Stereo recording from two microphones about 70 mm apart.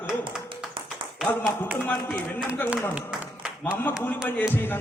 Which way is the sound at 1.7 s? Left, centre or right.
Left.